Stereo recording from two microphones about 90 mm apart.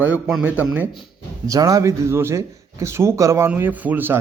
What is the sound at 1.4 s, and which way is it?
Speech, 40° right (ahead or behind).